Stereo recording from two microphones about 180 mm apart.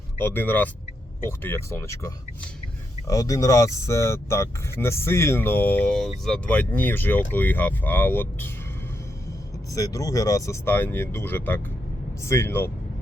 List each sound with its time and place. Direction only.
0.2 s speech: 10° left (ahead or behind)
9.7 s speech: 20° left (ahead or behind)